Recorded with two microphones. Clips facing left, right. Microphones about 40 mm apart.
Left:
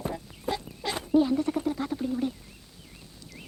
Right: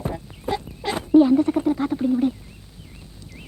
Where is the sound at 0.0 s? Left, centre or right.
Right.